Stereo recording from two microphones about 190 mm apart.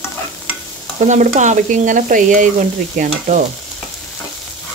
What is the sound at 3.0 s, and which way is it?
Speech, 40° right (ahead or behind).